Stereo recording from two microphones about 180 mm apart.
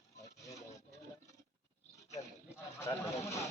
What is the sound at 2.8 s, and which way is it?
Speech, 15° left (ahead or behind).